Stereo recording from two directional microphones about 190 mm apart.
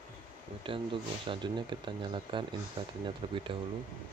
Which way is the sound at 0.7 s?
25° right (ahead or behind).